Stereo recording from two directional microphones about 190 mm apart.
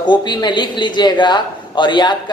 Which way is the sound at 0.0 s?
25° left (ahead or behind).